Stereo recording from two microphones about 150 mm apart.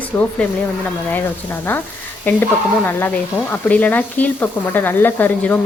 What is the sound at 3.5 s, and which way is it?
Speech, 10° left (ahead or behind).